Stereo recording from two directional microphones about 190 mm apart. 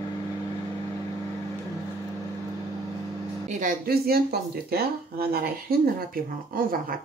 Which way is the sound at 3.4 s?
45° right (ahead or behind).